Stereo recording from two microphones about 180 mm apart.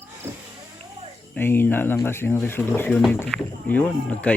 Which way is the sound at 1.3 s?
10° left (ahead or behind).